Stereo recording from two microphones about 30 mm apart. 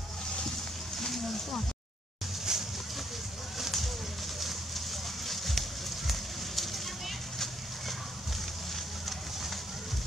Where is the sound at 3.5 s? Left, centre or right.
Centre.